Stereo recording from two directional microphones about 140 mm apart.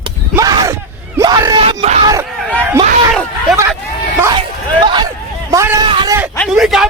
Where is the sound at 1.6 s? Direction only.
45° right (ahead or behind).